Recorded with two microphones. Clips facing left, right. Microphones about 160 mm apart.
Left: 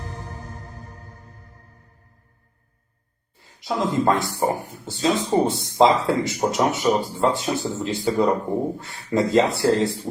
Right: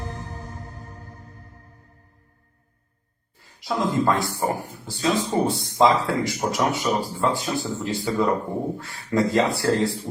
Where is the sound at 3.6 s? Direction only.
20° left (ahead or behind).